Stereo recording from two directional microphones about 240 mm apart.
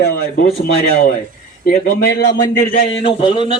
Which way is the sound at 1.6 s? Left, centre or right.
Left.